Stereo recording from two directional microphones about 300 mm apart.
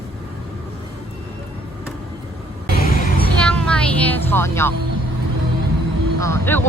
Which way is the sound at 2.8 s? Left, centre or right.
Left.